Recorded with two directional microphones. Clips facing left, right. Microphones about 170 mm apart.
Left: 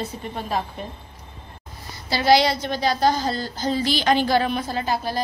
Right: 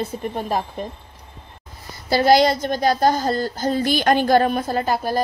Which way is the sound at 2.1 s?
50° right (ahead or behind).